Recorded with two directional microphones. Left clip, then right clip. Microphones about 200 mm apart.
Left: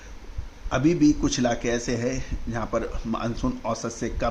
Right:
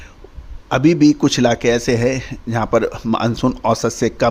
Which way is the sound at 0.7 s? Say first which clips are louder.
Right 8 dB; 55° right (ahead or behind).